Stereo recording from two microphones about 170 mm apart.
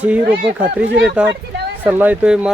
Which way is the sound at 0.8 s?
90° right.